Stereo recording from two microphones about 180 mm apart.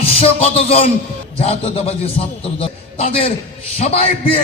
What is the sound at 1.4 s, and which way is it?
A man's voice, 30° left (ahead or behind).